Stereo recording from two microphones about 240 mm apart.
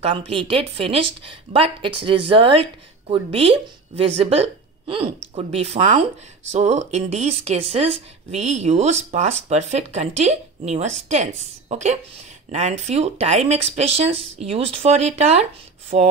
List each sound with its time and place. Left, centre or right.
0.5 s speech: right